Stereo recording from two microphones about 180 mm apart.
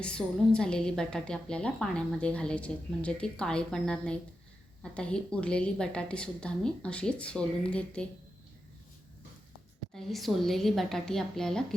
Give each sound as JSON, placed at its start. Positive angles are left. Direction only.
{"t": 0.0, "sound": "a woman's voice", "side_deg": 5}
{"t": 9.9, "sound": "a woman's voice", "side_deg": 0}